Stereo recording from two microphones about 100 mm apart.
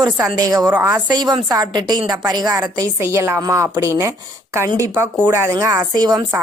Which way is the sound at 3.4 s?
35° right (ahead or behind).